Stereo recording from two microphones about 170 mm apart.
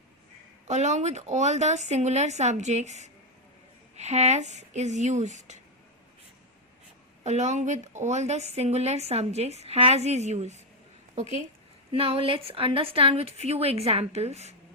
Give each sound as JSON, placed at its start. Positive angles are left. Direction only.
{"t": 0.7, "sound": "speech", "side_deg": -45}
{"t": 7.3, "sound": "a woman's voice", "side_deg": -45}